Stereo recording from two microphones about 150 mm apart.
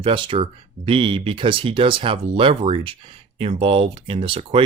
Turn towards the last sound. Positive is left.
turn(degrees=-35)  # may be behind; listen again after turning